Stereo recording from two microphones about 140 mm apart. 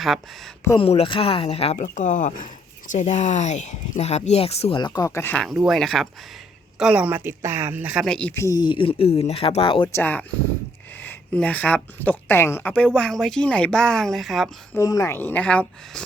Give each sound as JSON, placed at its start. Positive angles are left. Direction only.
{"t": 0.8, "sound": "speech", "side_deg": 40}
{"t": 1.8, "sound": "speech", "side_deg": 65}
{"t": 4.8, "sound": "speech", "side_deg": 25}
{"t": 5.4, "sound": "a woman's voice", "side_deg": 0}
{"t": 8.0, "sound": "a woman's voice", "side_deg": 5}
{"t": 8.4, "sound": "speech", "side_deg": 25}
{"t": 9.9, "sound": "a woman's voice", "side_deg": 10}
{"t": 12.7, "sound": "speech", "side_deg": 5}
{"t": 14.7, "sound": "a woman's voice", "side_deg": 25}